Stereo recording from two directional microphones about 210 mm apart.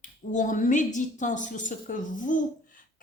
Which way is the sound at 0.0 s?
35° left (ahead or behind).